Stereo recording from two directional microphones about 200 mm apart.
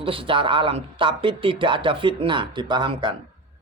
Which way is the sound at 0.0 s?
25° right (ahead or behind).